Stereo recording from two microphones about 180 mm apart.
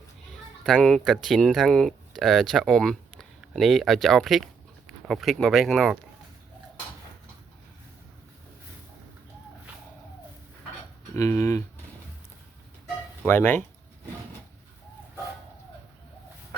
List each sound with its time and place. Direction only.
0.6 s speech: 5° left (ahead or behind)
11.1 s speech: 15° left (ahead or behind)
13.2 s speech: 10° left (ahead or behind)